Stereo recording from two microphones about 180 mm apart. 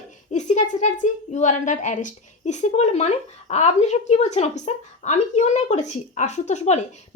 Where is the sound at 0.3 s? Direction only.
40° left (ahead or behind).